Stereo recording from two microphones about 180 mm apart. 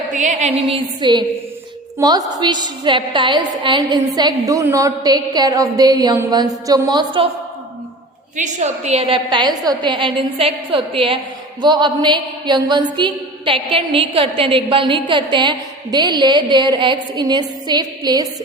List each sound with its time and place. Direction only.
0.1 s a woman's voice: 45° right (ahead or behind); by 7.3 s 25° right (ahead or behind)
8.4 s a woman's voice: 40° right (ahead or behind); by 18.3 s 20° right (ahead or behind)